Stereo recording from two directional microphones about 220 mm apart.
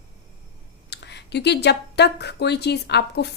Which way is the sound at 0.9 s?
50° left (ahead or behind).